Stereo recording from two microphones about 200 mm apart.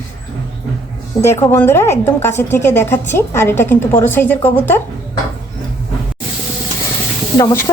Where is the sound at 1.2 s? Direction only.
10° left (ahead or behind).